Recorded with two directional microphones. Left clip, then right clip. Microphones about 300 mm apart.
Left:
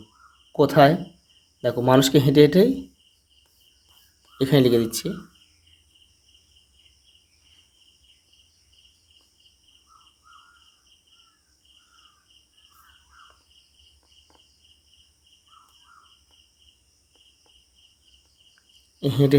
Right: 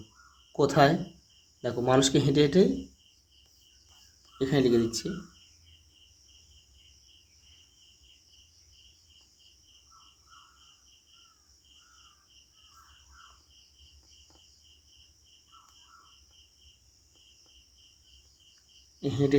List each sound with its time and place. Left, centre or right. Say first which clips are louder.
0.5 s speech: left 7 dB; centre
4.4 s speech: left 6 dB; left
18.9 s cricket: left 7 dB; left